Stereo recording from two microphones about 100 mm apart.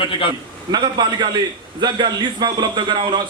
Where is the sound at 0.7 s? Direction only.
45° right (ahead or behind).